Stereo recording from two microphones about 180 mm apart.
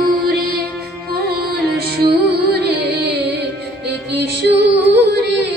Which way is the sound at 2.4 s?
65° right (ahead or behind).